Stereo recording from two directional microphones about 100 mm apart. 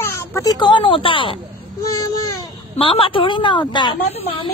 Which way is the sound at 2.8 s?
60° left (ahead or behind).